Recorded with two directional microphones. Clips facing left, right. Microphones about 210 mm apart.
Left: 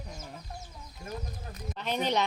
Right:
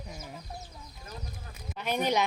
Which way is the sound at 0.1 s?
5° right (ahead or behind).